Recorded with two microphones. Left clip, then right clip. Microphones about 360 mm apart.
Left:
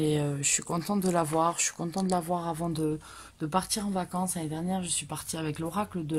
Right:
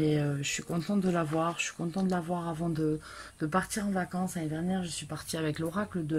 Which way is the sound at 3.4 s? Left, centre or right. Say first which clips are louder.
Left 1 dB; centre.